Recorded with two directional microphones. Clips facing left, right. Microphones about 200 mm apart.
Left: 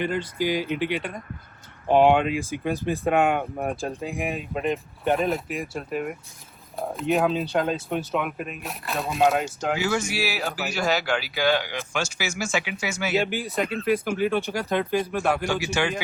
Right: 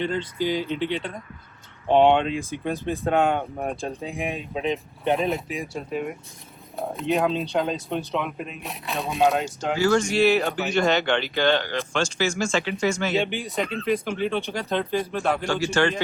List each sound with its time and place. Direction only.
0.0 s speech: 10° left (ahead or behind)